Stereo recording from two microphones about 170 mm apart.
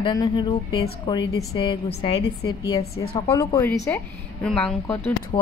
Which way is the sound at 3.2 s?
20° left (ahead or behind).